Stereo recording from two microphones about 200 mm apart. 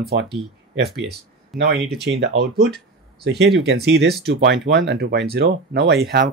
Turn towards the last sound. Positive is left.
turn(degrees=-55)  # may be behind; listen again after turning